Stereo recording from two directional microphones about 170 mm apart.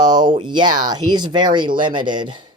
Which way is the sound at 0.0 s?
25° right (ahead or behind).